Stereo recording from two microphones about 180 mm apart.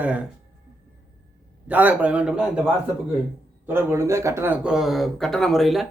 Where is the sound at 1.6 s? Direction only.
10° right (ahead or behind).